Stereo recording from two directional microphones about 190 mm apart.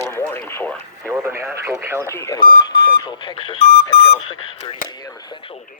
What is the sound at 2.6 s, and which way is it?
Speech, 25° left (ahead or behind).